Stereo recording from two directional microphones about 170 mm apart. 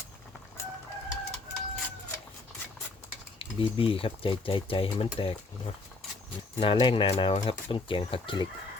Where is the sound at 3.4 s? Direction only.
35° left (ahead or behind).